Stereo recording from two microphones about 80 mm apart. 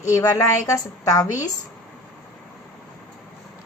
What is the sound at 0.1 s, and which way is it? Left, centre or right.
A woman's voice, left.